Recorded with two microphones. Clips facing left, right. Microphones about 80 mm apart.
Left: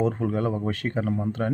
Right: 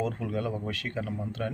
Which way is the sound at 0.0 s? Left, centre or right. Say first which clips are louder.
Left 6 dB; left.